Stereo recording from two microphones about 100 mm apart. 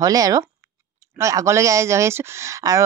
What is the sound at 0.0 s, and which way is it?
Speech, 35° right (ahead or behind).